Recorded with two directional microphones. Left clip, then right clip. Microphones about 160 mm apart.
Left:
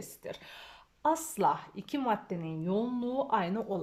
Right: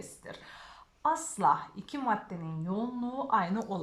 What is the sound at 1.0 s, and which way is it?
A woman's voice, 15° left (ahead or behind).